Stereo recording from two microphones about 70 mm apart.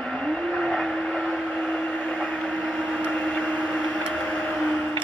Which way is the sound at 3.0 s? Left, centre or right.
Left.